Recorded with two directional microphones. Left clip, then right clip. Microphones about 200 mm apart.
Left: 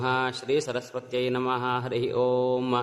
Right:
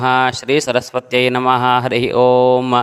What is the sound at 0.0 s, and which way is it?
A man's voice, 40° right (ahead or behind).